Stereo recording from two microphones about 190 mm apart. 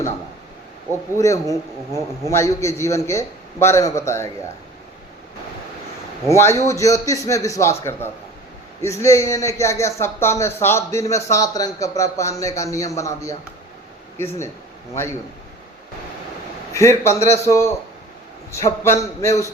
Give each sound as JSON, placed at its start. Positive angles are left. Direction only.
{"t": 1.1, "sound": "a man's voice", "side_deg": 15}
{"t": 6.2, "sound": "a man's voice", "side_deg": 15}
{"t": 14.2, "sound": "a man's voice", "side_deg": 15}
{"t": 16.7, "sound": "a man's voice", "side_deg": 15}